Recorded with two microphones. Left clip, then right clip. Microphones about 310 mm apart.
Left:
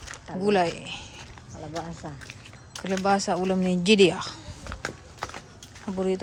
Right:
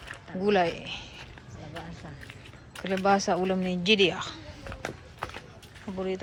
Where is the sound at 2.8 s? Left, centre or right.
Centre.